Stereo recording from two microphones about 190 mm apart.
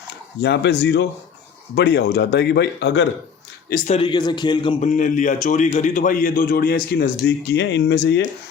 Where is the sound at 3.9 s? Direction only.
25° left (ahead or behind).